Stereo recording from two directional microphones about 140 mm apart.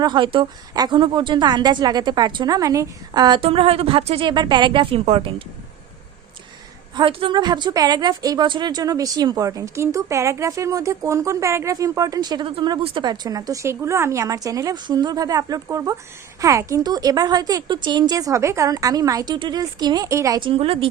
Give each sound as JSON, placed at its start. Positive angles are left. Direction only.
{"t": 0.0, "sound": "a woman's voice", "side_deg": -35}
{"t": 3.4, "sound": "a woman's voice", "side_deg": -40}
{"t": 6.9, "sound": "a woman's voice", "side_deg": -40}
{"t": 20.4, "sound": "a woman's voice", "side_deg": -40}